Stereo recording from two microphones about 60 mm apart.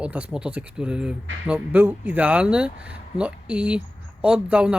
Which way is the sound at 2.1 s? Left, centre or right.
Right.